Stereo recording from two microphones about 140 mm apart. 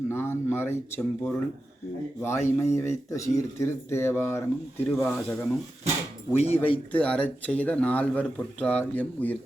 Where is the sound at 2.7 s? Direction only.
20° left (ahead or behind).